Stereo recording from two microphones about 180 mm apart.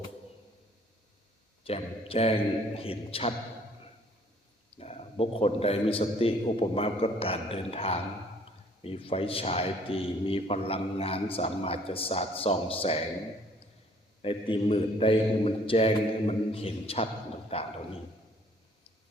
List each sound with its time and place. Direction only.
1.6 s a man's voice: 35° left (ahead or behind)
4.8 s a man's voice: 35° left (ahead or behind)
14.2 s a man's voice: 30° left (ahead or behind)